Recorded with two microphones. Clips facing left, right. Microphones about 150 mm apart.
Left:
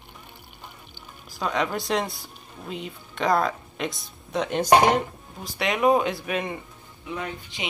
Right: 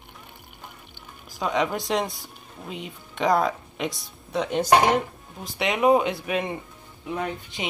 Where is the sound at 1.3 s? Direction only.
15° right (ahead or behind).